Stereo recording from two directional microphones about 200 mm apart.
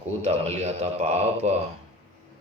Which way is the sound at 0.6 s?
30° right (ahead or behind).